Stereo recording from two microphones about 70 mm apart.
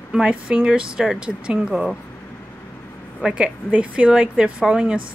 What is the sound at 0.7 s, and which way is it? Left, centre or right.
A woman's voice, centre.